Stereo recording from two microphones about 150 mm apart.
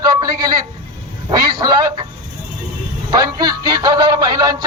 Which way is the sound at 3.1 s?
25° right (ahead or behind).